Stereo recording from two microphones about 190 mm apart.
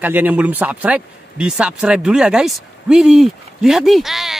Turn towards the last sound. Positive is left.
turn(degrees=0)  # may be behind; listen again after turning